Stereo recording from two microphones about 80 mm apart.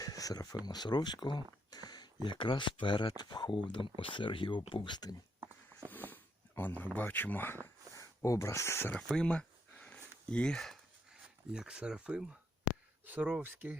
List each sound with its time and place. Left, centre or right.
0.0 s speech: left
2.2 s speech: left
5.9 s a sound: left
6.6 s speech: left
7.9 s speech: left
9.0 s a sound: centre
11.1 s speech: centre